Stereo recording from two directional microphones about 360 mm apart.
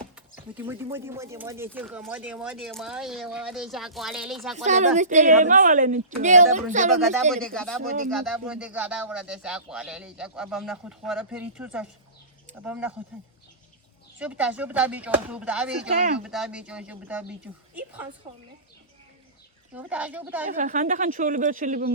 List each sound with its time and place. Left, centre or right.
0.5 s speech: centre
4.5 s speech: centre
7.0 s speech: centre
14.2 s speech: centre
19.7 s speech: centre
20.5 s speech: right